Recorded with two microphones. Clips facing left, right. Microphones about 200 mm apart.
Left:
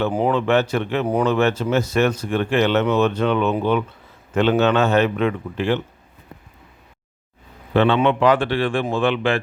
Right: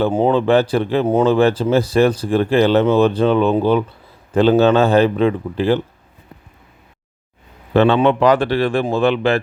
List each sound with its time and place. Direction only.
0.0 s speech: 25° right (ahead or behind)
7.7 s speech: 40° right (ahead or behind)